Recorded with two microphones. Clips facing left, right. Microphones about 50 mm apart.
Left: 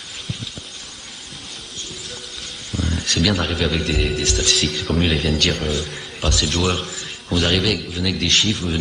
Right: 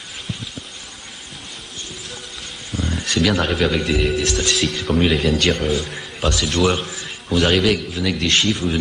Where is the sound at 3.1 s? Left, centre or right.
Centre.